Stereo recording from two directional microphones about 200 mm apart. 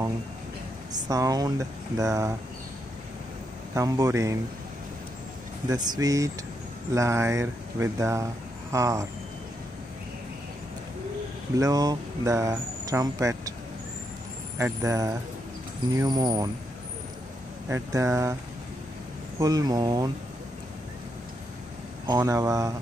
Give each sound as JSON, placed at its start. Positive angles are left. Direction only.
{"t": 0.9, "sound": "speech", "side_deg": -20}
{"t": 3.7, "sound": "speech", "side_deg": -20}
{"t": 5.7, "sound": "speech", "side_deg": -20}
{"t": 11.5, "sound": "speech", "side_deg": -20}
{"t": 14.6, "sound": "speech", "side_deg": -15}
{"t": 17.6, "sound": "speech", "side_deg": -15}
{"t": 19.4, "sound": "speech", "side_deg": -20}
{"t": 22.0, "sound": "speech", "side_deg": -20}